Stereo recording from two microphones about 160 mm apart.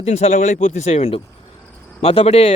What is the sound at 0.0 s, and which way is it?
Speech, 45° left (ahead or behind).